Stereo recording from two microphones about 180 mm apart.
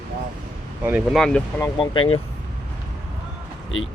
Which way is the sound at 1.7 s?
30° left (ahead or behind).